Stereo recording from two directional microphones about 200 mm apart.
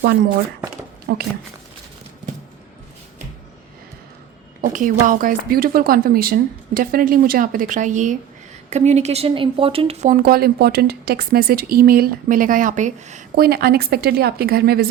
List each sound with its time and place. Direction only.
1.1 s speech: 55° right (ahead or behind)
4.6 s speech: 40° right (ahead or behind)
13.3 s speech: 50° right (ahead or behind)